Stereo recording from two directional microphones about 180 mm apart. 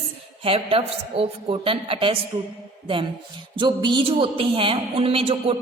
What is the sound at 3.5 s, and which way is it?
A man's voice, 25° right (ahead or behind).